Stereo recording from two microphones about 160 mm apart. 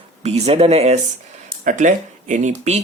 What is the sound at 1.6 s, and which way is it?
Speech, 50° right (ahead or behind).